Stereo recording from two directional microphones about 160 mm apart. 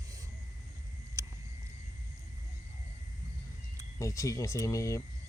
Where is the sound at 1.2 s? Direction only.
20° right (ahead or behind).